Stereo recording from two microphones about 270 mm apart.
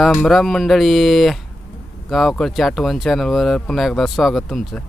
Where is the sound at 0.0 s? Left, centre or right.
Centre.